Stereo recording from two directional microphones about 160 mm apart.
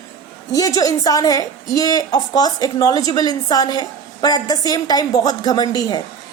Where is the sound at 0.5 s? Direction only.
20° left (ahead or behind).